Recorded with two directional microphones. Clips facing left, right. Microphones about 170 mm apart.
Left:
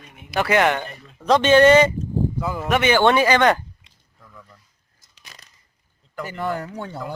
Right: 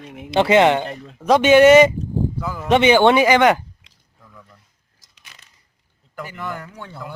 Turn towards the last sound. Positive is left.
turn(degrees=40)  # may be behind; listen again after turning